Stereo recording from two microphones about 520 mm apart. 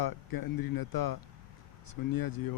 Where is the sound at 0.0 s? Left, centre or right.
Left.